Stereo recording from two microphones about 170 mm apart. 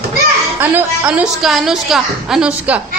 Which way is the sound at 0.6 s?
10° right (ahead or behind).